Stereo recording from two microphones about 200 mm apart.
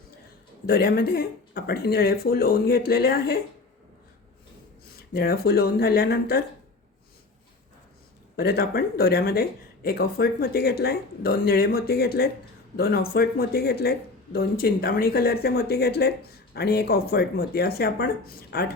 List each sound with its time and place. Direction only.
0.7 s speech: 50° left (ahead or behind)
5.1 s speech: 50° left (ahead or behind)
8.4 s speech: 50° left (ahead or behind)